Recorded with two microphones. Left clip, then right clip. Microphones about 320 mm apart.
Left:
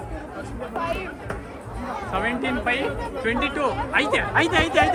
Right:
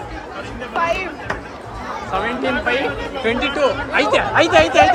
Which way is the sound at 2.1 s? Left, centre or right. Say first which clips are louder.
Right 5 dB; centre.